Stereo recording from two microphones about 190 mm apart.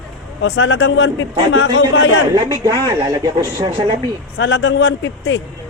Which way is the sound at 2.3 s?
20° right (ahead or behind).